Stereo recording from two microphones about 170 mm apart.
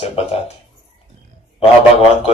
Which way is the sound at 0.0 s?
35° left (ahead or behind).